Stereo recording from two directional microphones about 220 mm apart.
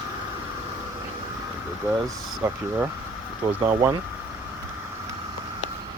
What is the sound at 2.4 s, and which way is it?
Speech, 10° right (ahead or behind).